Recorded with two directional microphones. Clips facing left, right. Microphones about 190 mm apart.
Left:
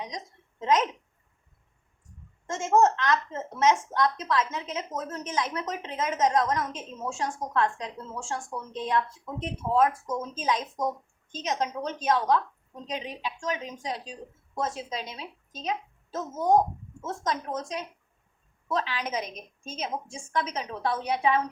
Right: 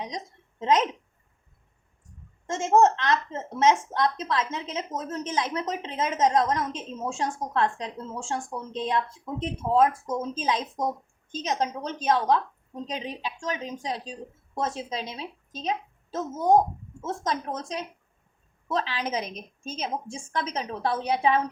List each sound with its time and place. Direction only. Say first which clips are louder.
0.6 s a woman's voice: right 1 dB; 25° right (ahead or behind)
2.5 s a woman's voice: right 2 dB; 25° right (ahead or behind)